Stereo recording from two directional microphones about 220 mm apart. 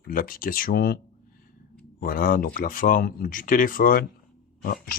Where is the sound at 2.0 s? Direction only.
40° left (ahead or behind).